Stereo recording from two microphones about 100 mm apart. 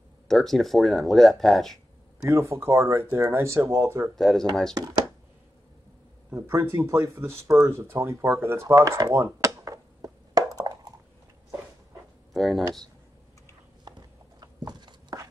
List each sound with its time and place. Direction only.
0.3 s speech: 5° left (ahead or behind)
2.2 s speech: 30° right (ahead or behind)
4.1 s speech: centre (ahead or behind)
4.7 s speech: 40° right (ahead or behind)
6.3 s speech: 25° right (ahead or behind)
10.7 s a sound: 45° right (ahead or behind)
12.4 s speech: centre (ahead or behind)
13.8 s a sound: 45° right (ahead or behind)